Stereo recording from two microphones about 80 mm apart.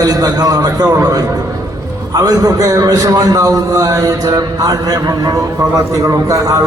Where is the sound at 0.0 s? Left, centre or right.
Right.